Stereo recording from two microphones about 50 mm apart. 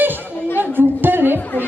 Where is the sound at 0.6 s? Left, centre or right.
Right.